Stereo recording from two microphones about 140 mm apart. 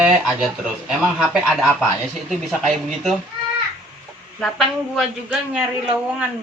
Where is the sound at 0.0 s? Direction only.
5° right (ahead or behind).